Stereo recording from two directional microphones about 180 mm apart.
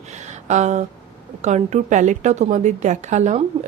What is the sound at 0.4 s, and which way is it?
A woman's voice, 40° right (ahead or behind).